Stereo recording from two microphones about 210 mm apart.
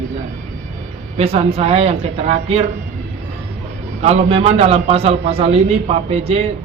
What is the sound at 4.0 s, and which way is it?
A man's voice, 30° right (ahead or behind).